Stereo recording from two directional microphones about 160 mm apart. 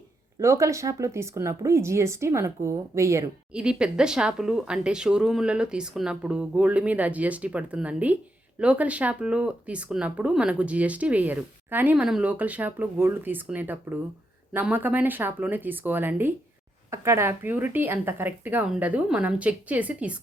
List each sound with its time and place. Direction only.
0.3 s speech: 20° right (ahead or behind)
3.5 s speech: 5° right (ahead or behind)